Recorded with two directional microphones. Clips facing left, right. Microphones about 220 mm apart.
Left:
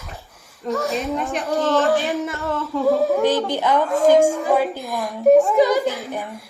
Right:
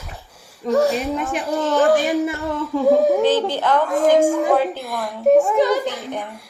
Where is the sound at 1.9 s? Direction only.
15° right (ahead or behind).